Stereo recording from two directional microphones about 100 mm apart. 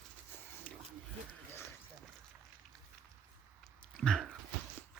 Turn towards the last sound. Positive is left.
turn(degrees=5)  # may be behind; listen again after turning